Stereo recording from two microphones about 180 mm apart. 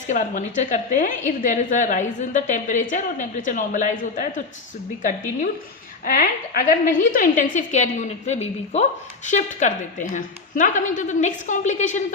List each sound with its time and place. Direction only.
0.1 s a woman's voice: 45° left (ahead or behind)
6.1 s a woman's voice: 50° left (ahead or behind)